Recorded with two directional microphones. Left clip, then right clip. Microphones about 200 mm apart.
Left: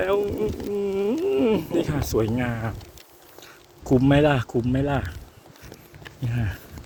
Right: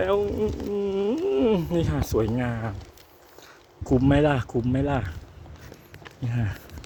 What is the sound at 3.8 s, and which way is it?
Speech, 5° left (ahead or behind).